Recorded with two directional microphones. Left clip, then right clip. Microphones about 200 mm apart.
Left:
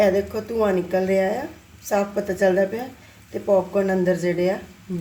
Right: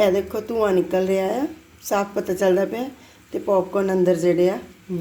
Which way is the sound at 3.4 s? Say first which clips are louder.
Left 1 dB; 25° right (ahead or behind).